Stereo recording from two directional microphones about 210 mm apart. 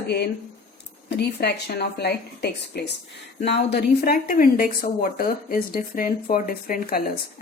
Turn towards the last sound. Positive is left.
turn(degrees=45)  # may be behind; listen again after turning